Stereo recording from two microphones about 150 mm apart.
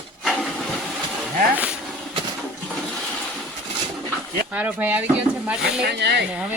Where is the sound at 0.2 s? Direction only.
Centre (ahead or behind).